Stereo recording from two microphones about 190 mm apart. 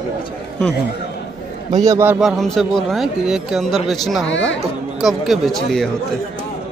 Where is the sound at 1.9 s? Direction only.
15° right (ahead or behind).